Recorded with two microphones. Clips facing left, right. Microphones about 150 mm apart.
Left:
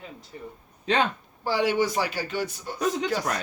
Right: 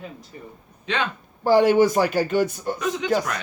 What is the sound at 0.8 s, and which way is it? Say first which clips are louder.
Speech: left 2 dB; 40° left (ahead or behind).